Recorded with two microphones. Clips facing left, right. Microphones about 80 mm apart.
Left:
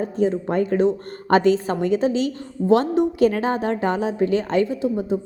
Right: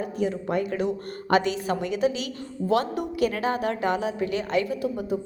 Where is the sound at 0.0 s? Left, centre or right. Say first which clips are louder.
Left 6 dB; left.